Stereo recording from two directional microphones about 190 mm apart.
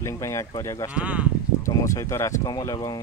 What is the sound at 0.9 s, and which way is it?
Speech, 5° right (ahead or behind).